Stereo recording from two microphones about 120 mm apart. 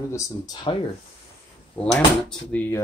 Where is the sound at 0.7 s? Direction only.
35° left (ahead or behind).